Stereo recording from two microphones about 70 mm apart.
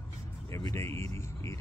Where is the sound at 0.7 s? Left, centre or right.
Left.